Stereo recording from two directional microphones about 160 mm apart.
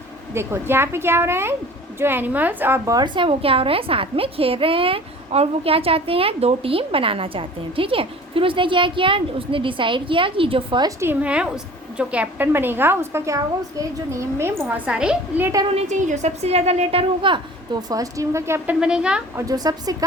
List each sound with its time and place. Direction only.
0.3 s a woman's voice: 15° right (ahead or behind)
11.0 s a woman's voice: 10° right (ahead or behind)
15.7 s a woman's voice: 45° right (ahead or behind); by 19.2 s 5° right (ahead or behind)
19.4 s a woman's voice: 25° right (ahead or behind)